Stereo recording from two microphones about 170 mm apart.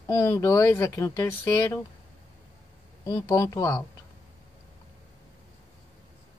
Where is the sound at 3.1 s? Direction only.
15° left (ahead or behind).